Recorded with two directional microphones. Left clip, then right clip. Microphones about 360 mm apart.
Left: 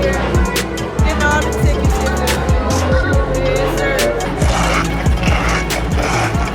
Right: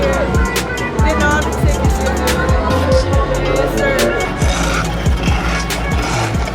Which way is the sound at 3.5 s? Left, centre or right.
Centre.